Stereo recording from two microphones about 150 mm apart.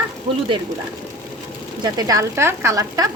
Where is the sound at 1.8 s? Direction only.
25° right (ahead or behind).